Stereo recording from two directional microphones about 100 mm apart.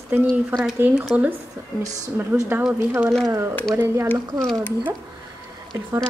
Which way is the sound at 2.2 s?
25° right (ahead or behind).